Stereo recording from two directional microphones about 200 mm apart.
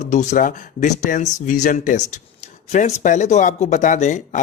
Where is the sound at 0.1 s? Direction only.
35° left (ahead or behind).